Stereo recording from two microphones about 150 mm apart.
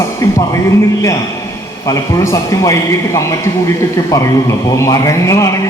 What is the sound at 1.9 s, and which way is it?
A man's voice, 20° left (ahead or behind).